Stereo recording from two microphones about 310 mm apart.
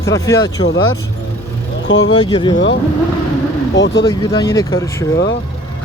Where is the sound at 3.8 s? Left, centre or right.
Left.